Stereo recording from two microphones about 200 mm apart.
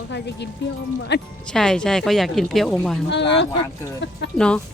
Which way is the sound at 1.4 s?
5° left (ahead or behind).